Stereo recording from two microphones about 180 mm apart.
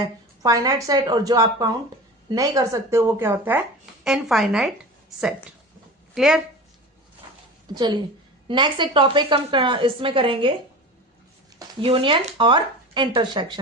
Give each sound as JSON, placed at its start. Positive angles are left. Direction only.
{"t": 0.0, "sound": "a woman's voice", "side_deg": -20}
{"t": 6.1, "sound": "a woman's voice", "side_deg": 0}
{"t": 7.7, "sound": "a woman's voice", "side_deg": -25}
{"t": 11.8, "sound": "a woman's voice", "side_deg": -30}